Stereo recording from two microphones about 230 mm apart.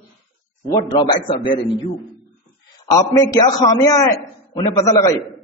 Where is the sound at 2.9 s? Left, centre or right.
Centre.